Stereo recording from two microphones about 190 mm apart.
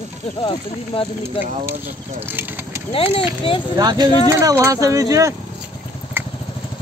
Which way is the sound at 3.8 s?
20° right (ahead or behind).